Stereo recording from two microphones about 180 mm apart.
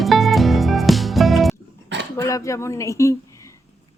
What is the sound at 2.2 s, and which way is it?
Speech, 15° left (ahead or behind).